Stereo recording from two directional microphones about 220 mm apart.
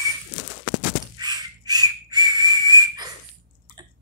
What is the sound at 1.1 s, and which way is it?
Whistle, 20° right (ahead or behind).